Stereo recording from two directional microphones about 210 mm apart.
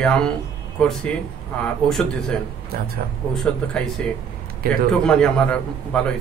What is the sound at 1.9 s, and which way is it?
Speech, centre (ahead or behind).